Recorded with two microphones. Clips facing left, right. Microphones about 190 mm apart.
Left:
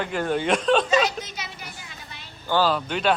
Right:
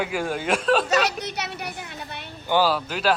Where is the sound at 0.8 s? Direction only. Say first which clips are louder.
Left 1 dB; 70° right (ahead or behind).